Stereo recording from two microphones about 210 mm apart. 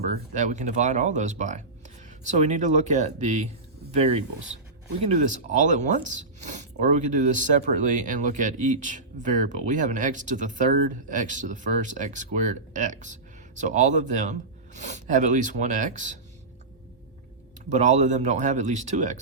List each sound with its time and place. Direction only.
0.1 s speech: 35° right (ahead or behind)
17.7 s speech: 35° right (ahead or behind)